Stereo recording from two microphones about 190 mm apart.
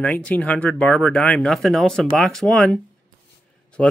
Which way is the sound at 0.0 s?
5° left (ahead or behind).